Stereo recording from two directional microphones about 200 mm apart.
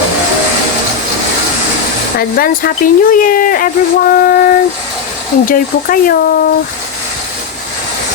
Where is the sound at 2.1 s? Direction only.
45° left (ahead or behind).